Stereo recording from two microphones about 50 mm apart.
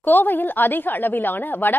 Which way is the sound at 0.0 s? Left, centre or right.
Left.